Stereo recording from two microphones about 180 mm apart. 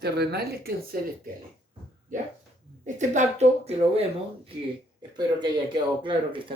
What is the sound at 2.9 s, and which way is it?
Speech, 40° right (ahead or behind).